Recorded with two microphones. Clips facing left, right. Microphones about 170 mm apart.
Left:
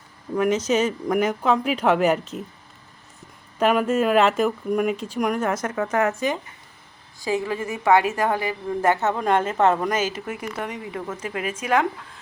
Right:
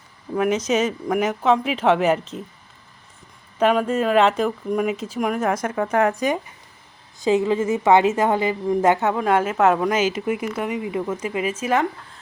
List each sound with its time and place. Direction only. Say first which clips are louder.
0.5 s speech: even; 30° left (ahead or behind)
1.0 s speech: right 1 dB; 5° right (ahead or behind)
3.6 s a woman's voice: right 1 dB; 5° left (ahead or behind)